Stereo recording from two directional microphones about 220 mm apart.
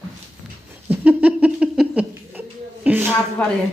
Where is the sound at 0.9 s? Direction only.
5° right (ahead or behind).